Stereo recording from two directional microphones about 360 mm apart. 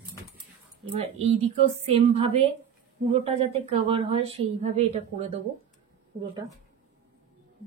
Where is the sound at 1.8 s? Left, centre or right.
Centre.